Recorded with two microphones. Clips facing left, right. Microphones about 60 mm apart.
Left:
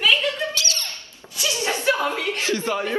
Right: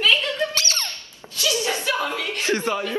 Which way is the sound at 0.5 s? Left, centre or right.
Right.